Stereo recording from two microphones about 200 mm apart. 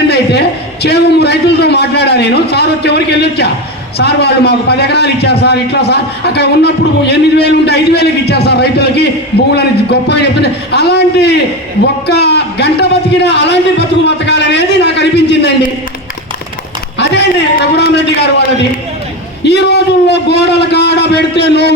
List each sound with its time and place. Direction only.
0.1 s a man's voice: 55° left (ahead or behind)
17.7 s a man's voice: 55° left (ahead or behind)
19.5 s a man's voice: 55° left (ahead or behind)